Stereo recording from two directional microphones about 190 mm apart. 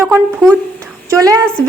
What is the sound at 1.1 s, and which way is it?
Speech, 20° right (ahead or behind).